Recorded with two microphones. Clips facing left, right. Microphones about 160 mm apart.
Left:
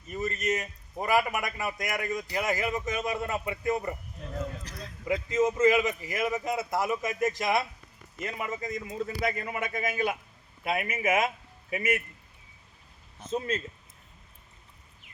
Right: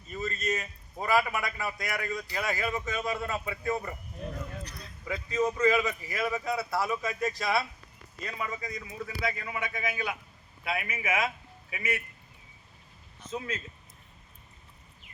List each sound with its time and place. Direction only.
0.1 s a sound: 20° left (ahead or behind)
1.3 s speech: 15° left (ahead or behind)
5.0 s speech: 20° left (ahead or behind)
9.0 s a man's voice: 50° left (ahead or behind)